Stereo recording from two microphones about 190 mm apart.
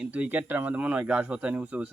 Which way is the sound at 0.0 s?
10° right (ahead or behind).